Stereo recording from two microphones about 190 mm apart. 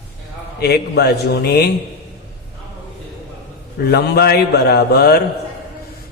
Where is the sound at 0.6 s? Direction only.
60° left (ahead or behind).